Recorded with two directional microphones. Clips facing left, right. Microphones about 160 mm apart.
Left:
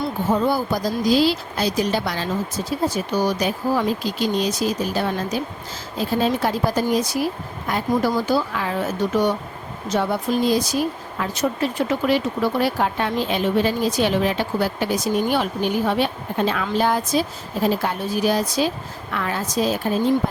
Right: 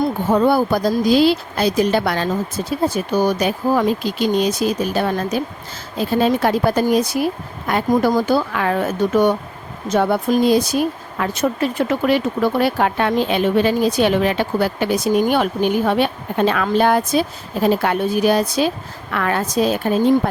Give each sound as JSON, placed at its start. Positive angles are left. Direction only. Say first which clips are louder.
{"t": 0.3, "sound": "speech", "louder": "right 5 dB", "side_deg": -65}